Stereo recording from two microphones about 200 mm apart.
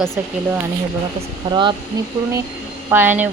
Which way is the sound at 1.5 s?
25° right (ahead or behind).